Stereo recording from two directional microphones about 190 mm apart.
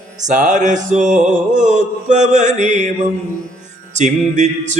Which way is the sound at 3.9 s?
40° right (ahead or behind).